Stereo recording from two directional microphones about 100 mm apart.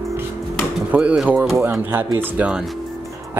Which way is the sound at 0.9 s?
15° right (ahead or behind).